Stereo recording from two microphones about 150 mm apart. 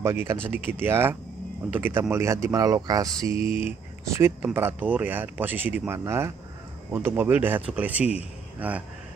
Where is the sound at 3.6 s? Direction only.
15° right (ahead or behind).